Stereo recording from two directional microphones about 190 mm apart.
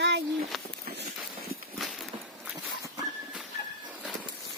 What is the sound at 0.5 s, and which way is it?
Speech, centre (ahead or behind).